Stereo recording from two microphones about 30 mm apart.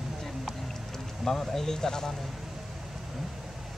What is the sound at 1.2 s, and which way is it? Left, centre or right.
Speech, centre.